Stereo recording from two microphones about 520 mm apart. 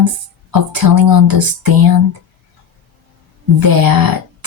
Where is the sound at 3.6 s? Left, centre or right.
Right.